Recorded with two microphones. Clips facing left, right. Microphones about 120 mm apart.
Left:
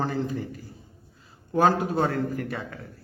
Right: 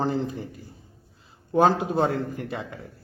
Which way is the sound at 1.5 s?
20° right (ahead or behind).